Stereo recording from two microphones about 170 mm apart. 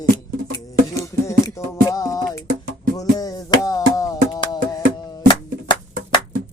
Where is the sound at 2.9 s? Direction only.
20° left (ahead or behind).